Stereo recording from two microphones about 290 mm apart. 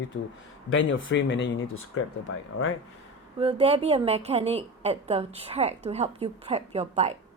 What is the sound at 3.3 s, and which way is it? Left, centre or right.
A woman's voice, centre.